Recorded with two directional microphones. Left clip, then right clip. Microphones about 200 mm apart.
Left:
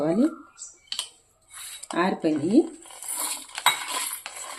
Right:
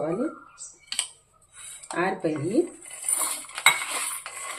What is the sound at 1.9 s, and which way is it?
Speech, 50° left (ahead or behind).